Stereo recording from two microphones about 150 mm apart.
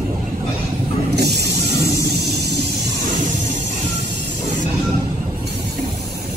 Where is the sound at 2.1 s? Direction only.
90° right.